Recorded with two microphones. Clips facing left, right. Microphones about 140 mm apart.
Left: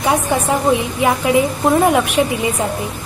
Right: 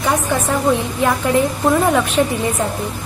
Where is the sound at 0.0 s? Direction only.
15° left (ahead or behind).